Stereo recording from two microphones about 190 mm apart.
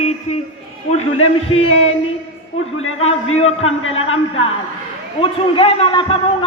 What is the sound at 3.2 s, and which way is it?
A man's voice, 90° left.